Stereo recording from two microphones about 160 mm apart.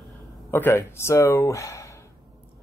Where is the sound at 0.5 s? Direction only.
15° left (ahead or behind).